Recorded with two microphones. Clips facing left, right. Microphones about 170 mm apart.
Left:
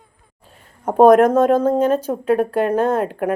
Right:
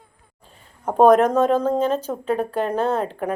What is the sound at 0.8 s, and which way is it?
Speech, 10° left (ahead or behind).